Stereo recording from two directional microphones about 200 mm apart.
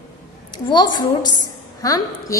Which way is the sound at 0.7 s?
20° left (ahead or behind).